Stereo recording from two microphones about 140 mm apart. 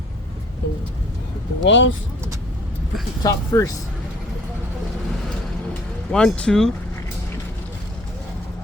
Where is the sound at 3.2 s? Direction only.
25° left (ahead or behind).